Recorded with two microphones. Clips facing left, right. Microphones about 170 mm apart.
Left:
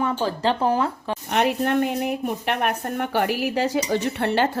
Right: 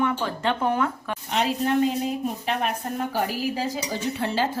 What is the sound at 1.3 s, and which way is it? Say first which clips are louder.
A woman's voice: left 2 dB; 60° left (ahead or behind).